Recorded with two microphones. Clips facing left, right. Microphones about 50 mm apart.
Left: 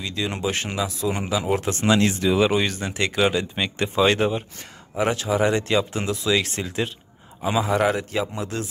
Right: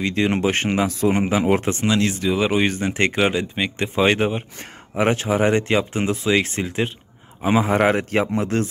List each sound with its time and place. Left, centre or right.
0.0 s speech: right
1.9 s speech: centre
2.5 s speech: right
4.9 s speech: right